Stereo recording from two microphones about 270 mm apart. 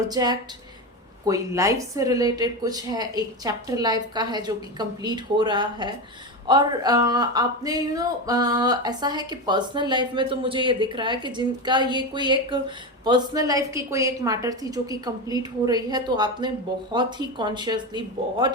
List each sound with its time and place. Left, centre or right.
0.1 s speech: centre